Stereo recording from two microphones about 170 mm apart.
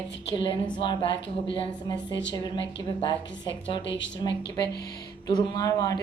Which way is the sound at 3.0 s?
30° left (ahead or behind).